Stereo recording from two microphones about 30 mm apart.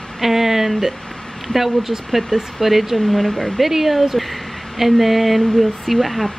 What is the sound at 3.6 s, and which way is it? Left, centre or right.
Speech, centre.